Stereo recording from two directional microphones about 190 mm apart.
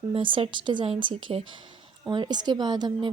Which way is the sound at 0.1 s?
25° right (ahead or behind).